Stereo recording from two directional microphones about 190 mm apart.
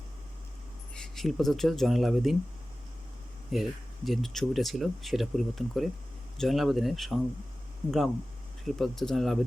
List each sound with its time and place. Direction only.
0.9 s speech: 5° left (ahead or behind)
3.5 s speech: centre (ahead or behind)